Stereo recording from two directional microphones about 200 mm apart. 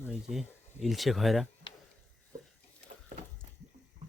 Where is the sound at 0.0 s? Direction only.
Centre (ahead or behind).